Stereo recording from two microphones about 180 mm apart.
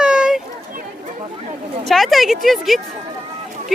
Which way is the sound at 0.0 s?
5° right (ahead or behind).